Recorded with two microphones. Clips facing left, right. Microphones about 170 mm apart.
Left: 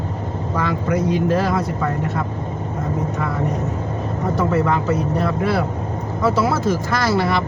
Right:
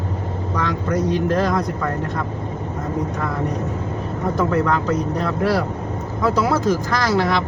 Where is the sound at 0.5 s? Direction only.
5° left (ahead or behind).